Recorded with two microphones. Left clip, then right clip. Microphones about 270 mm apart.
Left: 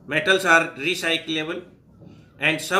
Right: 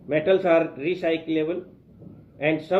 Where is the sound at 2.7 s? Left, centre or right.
Centre.